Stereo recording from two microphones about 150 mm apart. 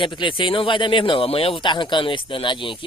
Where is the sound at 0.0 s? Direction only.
35° left (ahead or behind).